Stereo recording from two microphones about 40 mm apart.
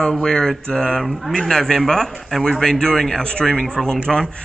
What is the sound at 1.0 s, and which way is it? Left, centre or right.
Speech, centre.